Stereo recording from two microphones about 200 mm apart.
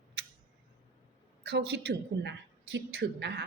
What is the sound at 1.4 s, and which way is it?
A woman's voice, 55° right (ahead or behind).